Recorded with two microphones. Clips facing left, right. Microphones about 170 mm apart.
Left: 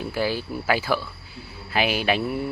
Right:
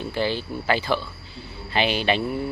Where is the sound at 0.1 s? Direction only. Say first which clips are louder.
Right 1 dB; 5° left (ahead or behind).